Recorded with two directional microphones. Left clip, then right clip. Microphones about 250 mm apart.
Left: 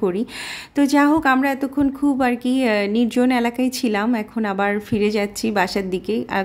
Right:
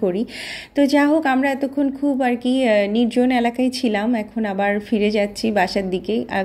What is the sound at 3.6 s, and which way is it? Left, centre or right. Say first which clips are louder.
Speech: right 1 dB; left.